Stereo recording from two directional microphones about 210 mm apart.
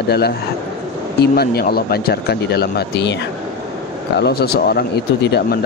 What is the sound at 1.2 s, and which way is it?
Speech, 50° left (ahead or behind).